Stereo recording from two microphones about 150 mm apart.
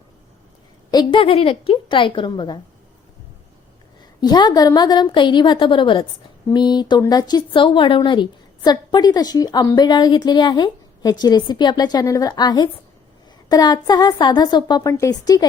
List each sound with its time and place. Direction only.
0.9 s a woman's voice: 30° left (ahead or behind)
4.2 s a woman's voice: 25° left (ahead or behind)